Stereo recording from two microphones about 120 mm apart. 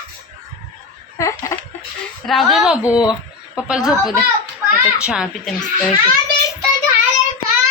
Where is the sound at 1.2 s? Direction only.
25° left (ahead or behind).